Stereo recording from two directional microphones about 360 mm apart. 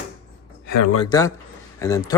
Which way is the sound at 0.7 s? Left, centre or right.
Left.